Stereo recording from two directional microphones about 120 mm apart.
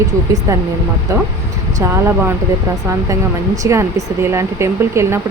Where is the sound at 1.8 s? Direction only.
25° right (ahead or behind).